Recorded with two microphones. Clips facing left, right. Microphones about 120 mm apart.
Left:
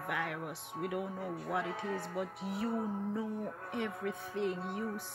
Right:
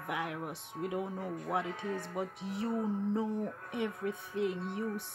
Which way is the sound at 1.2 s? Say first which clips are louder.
Right 1 dB; 10° left (ahead or behind).